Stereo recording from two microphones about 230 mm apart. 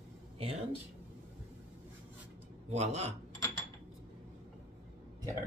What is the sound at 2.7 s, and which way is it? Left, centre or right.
Speech, right.